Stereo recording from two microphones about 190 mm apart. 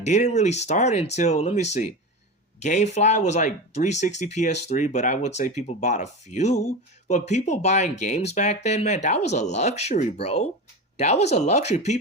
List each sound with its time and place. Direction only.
0.0 s speech: 40° left (ahead or behind)